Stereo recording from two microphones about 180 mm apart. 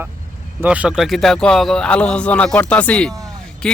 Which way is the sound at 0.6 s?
5° right (ahead or behind).